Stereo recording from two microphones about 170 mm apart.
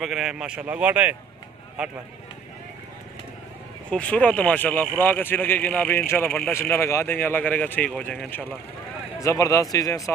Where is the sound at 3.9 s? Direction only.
5° left (ahead or behind).